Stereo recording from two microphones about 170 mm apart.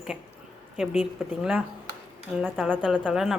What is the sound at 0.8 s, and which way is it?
A woman's voice, 5° right (ahead or behind).